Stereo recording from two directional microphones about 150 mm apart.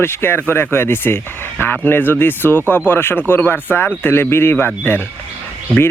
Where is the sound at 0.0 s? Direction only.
15° left (ahead or behind).